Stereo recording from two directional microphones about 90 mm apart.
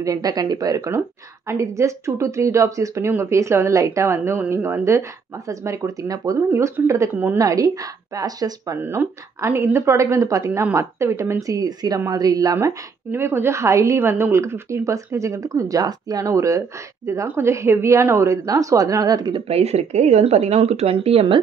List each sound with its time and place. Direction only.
0.0 s speech: 40° right (ahead or behind)
8.8 s speech: 30° right (ahead or behind); by 12.5 s 45° right (ahead or behind)
13.1 s speech: 25° right (ahead or behind); by 19.3 s 45° right (ahead or behind)
20.5 s speech: 90° right